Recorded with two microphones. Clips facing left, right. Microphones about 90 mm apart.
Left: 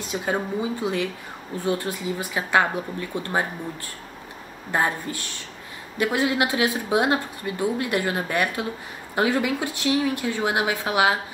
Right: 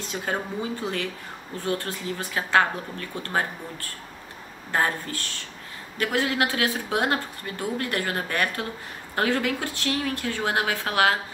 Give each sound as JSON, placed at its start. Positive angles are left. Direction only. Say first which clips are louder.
{"t": 0.1, "sound": "a woman's voice", "louder": "left 4 dB", "side_deg": 15}
{"t": 4.6, "sound": "a woman's voice", "louder": "left 1 dB", "side_deg": 15}